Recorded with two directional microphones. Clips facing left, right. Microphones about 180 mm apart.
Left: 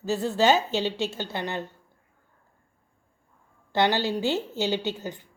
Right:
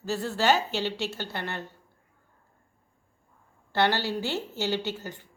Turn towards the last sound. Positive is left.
turn(degrees=15)  # may be behind; listen again after turning